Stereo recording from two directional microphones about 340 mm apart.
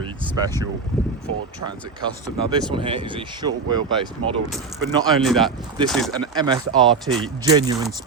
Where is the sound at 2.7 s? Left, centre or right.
Centre.